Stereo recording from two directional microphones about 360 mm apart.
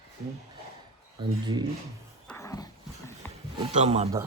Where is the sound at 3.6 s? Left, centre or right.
Centre.